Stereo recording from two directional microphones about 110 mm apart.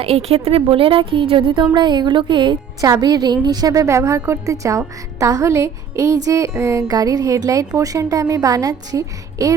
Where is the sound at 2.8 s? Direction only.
35° right (ahead or behind).